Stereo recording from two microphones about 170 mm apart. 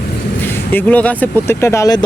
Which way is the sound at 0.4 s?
10° left (ahead or behind).